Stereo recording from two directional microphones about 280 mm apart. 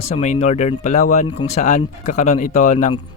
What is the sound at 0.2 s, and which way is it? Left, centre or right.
Speech, left.